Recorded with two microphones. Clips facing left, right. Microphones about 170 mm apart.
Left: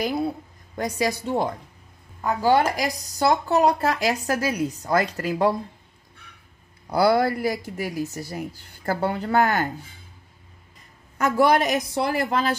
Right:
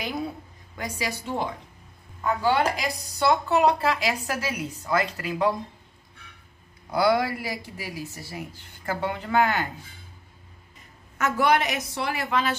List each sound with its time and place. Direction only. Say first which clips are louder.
0.0 s a woman's voice: left 6 dB; 35° left (ahead or behind)
6.9 s speech: left 3 dB; 35° left (ahead or behind)
11.1 s speech: left 3 dB; 35° left (ahead or behind)